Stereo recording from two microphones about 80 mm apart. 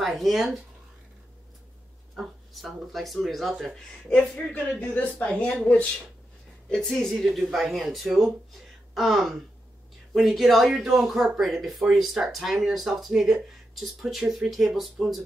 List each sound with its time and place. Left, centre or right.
0.0 s speech: centre
2.1 s speech: centre
4.4 s a woman's voice: centre
6.7 s speech: centre